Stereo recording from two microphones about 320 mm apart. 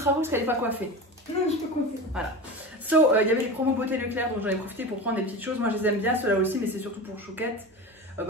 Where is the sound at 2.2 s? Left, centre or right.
Centre.